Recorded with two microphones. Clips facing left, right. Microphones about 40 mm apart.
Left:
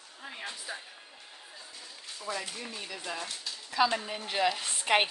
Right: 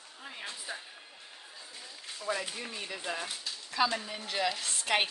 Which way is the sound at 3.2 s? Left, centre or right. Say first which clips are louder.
Even; centre.